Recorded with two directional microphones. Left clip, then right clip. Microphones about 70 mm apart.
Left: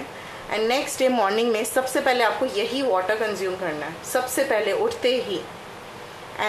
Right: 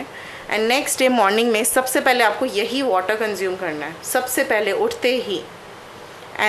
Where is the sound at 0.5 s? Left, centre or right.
Right.